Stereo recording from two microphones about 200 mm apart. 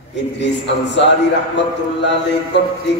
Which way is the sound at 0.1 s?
60° left (ahead or behind).